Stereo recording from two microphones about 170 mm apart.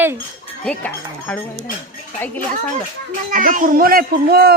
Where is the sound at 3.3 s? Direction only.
55° right (ahead or behind).